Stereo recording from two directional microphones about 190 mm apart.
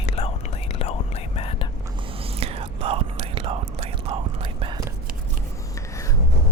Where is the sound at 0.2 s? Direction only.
30° left (ahead or behind).